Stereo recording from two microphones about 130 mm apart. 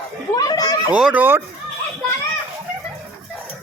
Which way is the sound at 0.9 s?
10° right (ahead or behind).